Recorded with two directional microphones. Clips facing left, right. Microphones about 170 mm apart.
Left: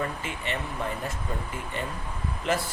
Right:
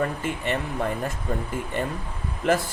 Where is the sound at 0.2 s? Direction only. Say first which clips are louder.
Right 6 dB; 50° right (ahead or behind).